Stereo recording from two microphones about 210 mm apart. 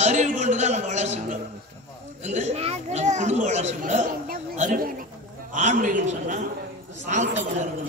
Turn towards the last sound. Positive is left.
turn(degrees=-35)  # may be behind; listen again after turning